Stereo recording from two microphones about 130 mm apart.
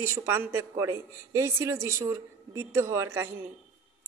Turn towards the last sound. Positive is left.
turn(degrees=-20)  # may be behind; listen again after turning